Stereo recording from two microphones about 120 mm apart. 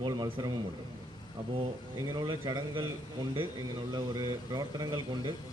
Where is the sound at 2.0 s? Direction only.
35° right (ahead or behind).